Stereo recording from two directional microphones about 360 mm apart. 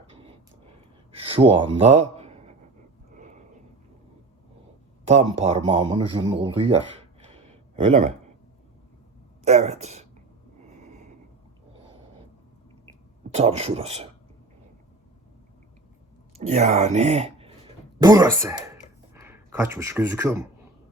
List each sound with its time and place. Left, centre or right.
0.1 s a sound: centre
1.1 s speech: centre
5.0 s speech: centre
7.9 s speech: centre
9.4 s speech: centre
13.3 s speech: centre
16.5 s speech: centre